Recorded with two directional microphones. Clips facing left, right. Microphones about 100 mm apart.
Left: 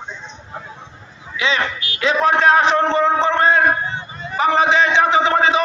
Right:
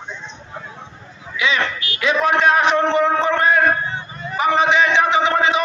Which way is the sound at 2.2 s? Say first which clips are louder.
Left 2 dB; 30° left (ahead or behind).